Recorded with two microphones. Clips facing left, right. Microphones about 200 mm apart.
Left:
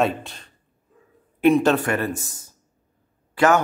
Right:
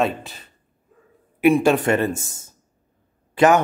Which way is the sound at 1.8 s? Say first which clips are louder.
Right 4 dB; 25° right (ahead or behind).